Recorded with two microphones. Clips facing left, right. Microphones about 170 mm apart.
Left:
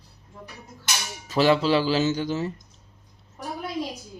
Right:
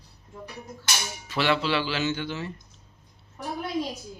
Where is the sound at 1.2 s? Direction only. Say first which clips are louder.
Left 6 dB; 40° left (ahead or behind).